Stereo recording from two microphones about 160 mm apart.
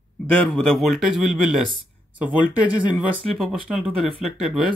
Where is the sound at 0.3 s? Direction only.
5° left (ahead or behind).